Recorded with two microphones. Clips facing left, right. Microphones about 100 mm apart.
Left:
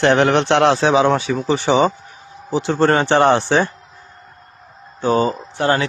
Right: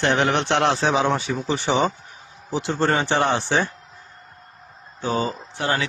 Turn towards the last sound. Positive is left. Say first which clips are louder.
# left 6 dB
turn(degrees=50)  # may be behind; listen again after turning